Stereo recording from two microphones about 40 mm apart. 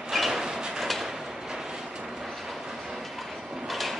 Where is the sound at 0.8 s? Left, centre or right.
Centre.